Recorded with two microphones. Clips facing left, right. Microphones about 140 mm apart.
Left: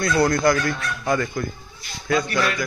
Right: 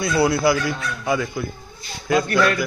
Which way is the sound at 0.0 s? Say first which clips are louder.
Even; 5° right (ahead or behind).